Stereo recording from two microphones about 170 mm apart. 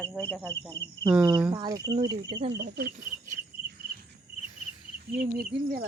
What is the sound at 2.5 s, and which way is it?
Speech, 75° right (ahead or behind).